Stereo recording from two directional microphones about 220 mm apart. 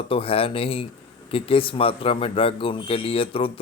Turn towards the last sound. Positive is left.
turn(degrees=25)  # may be behind; listen again after turning